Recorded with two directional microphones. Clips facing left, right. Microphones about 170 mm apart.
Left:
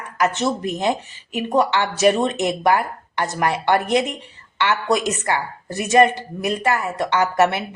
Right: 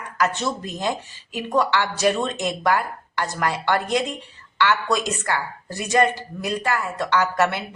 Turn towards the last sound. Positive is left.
turn(degrees=20)  # may be behind; listen again after turning